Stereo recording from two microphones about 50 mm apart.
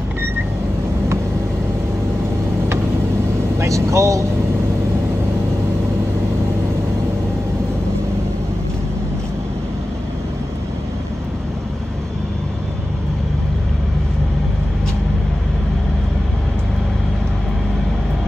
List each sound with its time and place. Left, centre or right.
3.5 s speech: right